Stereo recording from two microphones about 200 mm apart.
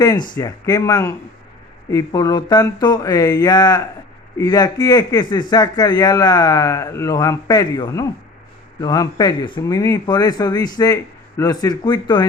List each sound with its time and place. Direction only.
0.3 s speech: 20° left (ahead or behind)